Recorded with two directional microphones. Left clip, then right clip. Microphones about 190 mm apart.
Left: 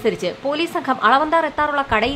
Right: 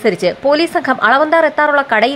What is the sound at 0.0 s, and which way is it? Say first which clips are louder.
A woman's voice: right 7 dB; 15° right (ahead or behind).